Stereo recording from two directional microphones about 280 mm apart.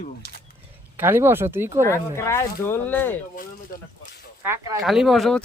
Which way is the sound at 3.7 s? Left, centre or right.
Left.